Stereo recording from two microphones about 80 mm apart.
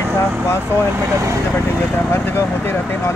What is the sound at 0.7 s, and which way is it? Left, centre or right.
Speech, right.